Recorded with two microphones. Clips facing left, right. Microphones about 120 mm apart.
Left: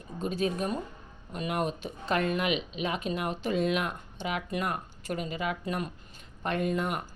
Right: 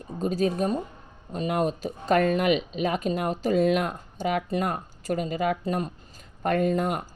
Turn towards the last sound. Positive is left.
turn(degrees=-40)  # may be behind; listen again after turning